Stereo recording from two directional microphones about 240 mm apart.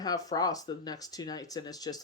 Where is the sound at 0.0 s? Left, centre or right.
Centre.